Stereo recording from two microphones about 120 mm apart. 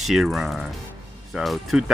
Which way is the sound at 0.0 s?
Centre (ahead or behind).